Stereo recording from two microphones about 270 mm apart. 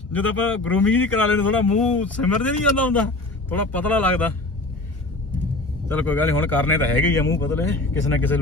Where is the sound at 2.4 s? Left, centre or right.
Centre.